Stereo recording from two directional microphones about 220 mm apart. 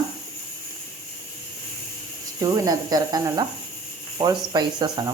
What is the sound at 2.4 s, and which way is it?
Speech, 15° right (ahead or behind).